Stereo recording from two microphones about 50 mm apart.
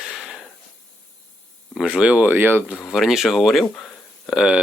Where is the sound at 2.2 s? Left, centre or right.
Right.